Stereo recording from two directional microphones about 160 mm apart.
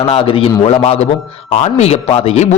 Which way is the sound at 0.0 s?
35° left (ahead or behind).